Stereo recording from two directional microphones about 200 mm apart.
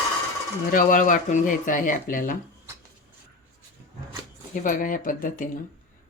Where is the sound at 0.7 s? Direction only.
45° left (ahead or behind).